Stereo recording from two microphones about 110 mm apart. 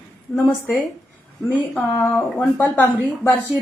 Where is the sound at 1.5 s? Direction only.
15° left (ahead or behind).